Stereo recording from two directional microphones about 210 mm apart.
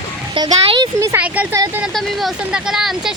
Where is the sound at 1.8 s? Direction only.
Centre (ahead or behind).